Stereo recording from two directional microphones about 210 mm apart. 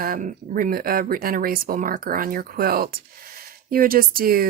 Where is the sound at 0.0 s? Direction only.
40° right (ahead or behind).